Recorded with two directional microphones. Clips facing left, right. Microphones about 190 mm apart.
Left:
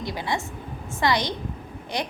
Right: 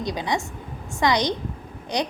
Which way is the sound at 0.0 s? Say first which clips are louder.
Right 3 dB; 20° right (ahead or behind).